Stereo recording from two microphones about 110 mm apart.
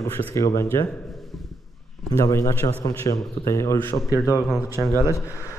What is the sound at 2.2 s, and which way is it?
A man's voice, 30° left (ahead or behind).